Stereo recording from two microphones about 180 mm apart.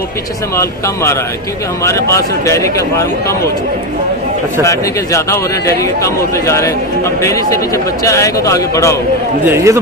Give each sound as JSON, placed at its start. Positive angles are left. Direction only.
{"t": 1.9, "sound": "a man's voice", "side_deg": 15}
{"t": 4.6, "sound": "a man's voice", "side_deg": 15}
{"t": 9.4, "sound": "a man's voice", "side_deg": -15}